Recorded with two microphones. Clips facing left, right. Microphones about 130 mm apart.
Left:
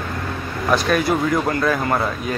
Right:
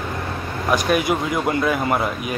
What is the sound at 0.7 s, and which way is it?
Speech, 15° right (ahead or behind).